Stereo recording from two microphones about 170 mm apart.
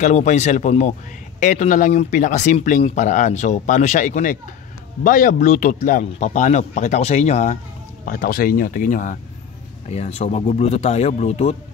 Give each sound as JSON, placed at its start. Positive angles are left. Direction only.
{"t": 0.0, "sound": "a man's voice", "side_deg": 45}
{"t": 8.0, "sound": "speech", "side_deg": 55}